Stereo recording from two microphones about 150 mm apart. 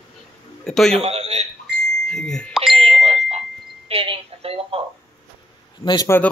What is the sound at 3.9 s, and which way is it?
Telephone, 40° right (ahead or behind).